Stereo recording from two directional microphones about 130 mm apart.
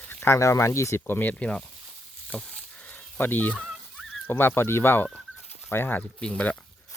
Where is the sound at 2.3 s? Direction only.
5° left (ahead or behind).